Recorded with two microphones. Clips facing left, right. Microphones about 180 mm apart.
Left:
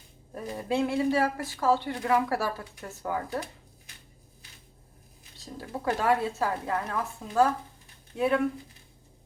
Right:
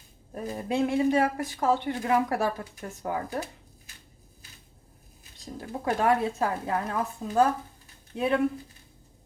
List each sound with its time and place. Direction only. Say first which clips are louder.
0.3 s speech: right 1 dB; 20° right (ahead or behind)
5.5 s speech: right 2 dB; 20° right (ahead or behind)